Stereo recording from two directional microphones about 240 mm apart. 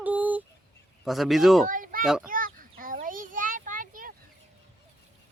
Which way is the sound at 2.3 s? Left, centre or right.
Right.